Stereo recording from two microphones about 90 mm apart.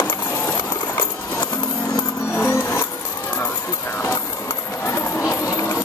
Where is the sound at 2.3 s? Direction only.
25° left (ahead or behind).